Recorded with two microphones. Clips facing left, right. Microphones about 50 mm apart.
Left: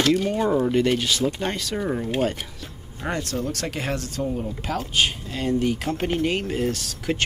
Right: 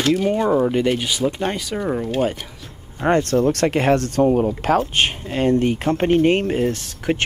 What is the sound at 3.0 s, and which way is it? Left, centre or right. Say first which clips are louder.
Speech: right 10 dB; right.